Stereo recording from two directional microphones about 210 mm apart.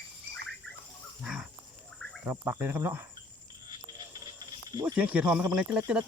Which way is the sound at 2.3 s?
10° right (ahead or behind).